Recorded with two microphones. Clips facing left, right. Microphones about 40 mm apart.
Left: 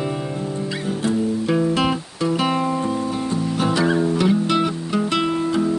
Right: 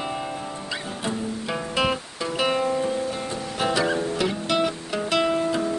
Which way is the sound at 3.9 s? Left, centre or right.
Centre.